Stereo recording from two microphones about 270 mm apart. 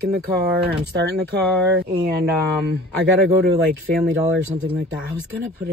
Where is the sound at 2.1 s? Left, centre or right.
Right.